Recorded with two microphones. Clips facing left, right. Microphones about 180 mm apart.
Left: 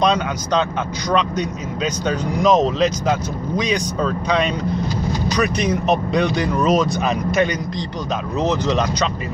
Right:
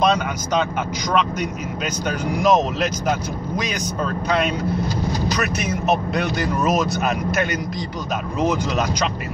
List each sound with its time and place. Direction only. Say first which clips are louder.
2.0 s speech: left 1 dB; 10° right (ahead or behind)
3.6 s speech: left 7 dB; 5° right (ahead or behind)